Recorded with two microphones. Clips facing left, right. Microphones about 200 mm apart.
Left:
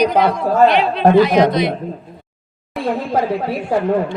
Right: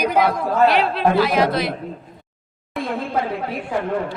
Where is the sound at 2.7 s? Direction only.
35° left (ahead or behind).